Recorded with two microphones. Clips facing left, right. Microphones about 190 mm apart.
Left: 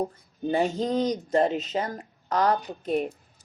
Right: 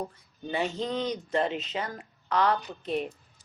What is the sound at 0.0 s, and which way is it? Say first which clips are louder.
Speech: left 8 dB; 40° left (ahead or behind).